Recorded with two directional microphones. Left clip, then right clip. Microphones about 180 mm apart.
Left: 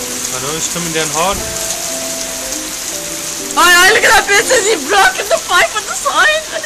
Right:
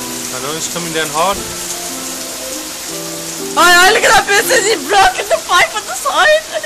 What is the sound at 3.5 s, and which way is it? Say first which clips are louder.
Speech: even; 35° right (ahead or behind).